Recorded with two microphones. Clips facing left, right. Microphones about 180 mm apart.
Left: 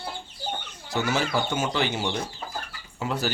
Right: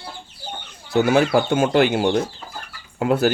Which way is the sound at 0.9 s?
55° right (ahead or behind).